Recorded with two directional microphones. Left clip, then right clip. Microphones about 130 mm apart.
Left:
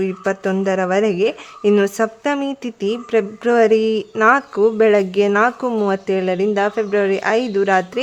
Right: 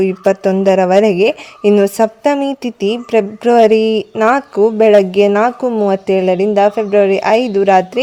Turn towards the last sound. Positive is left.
turn(degrees=-30)  # may be behind; listen again after turning